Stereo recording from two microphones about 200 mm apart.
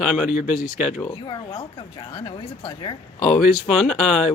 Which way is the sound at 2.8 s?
25° left (ahead or behind).